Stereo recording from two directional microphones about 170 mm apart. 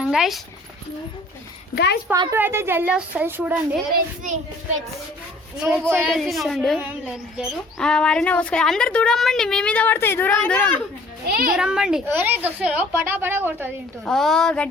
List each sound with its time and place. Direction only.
0.0 s speech: 5° right (ahead or behind)
1.7 s a woman's voice: 75° left (ahead or behind)
2.3 s a woman's voice: 15° right (ahead or behind)
5.8 s speech: centre (ahead or behind)
11.3 s a child's voice: 60° right (ahead or behind)
11.5 s a woman's voice: 5° right (ahead or behind)
14.0 s speech: centre (ahead or behind)